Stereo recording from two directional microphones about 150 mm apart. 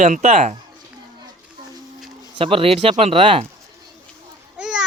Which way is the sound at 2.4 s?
40° right (ahead or behind).